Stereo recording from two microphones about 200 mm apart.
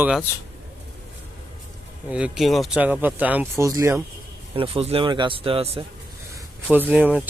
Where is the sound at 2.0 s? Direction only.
5° right (ahead or behind).